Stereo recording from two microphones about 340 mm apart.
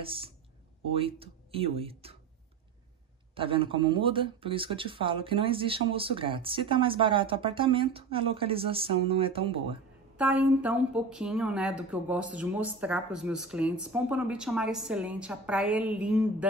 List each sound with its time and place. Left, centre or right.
0.0 s speech: centre
3.3 s speech: centre
10.1 s speech: centre